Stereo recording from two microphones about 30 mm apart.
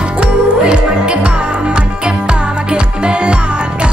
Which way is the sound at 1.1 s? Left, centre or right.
Right.